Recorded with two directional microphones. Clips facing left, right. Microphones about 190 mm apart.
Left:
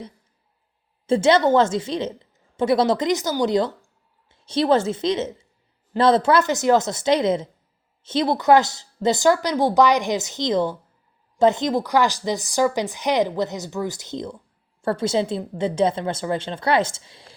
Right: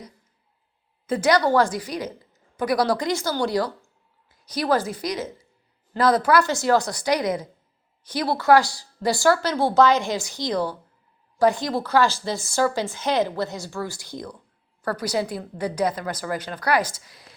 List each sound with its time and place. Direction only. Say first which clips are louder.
1.0 s a woman's voice: left 3 dB; 25° left (ahead or behind)